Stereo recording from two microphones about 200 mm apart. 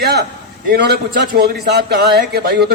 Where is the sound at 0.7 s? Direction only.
55° right (ahead or behind).